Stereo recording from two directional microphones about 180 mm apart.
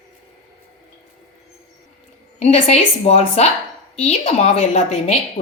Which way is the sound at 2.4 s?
40° left (ahead or behind).